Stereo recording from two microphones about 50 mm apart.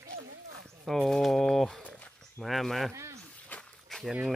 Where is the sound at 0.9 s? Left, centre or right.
Centre.